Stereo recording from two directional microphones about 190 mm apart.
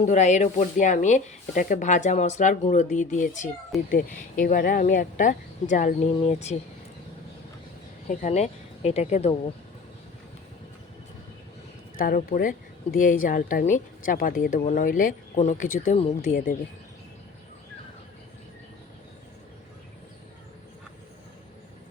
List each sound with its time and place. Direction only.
0.0 s speech: 40° left (ahead or behind)
8.0 s speech: 40° left (ahead or behind)
11.9 s speech: 45° left (ahead or behind)